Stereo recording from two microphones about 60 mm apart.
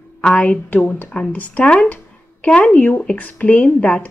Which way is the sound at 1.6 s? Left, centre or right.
Centre.